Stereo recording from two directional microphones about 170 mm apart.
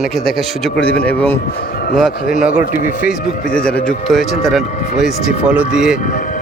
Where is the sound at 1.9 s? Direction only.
Centre (ahead or behind).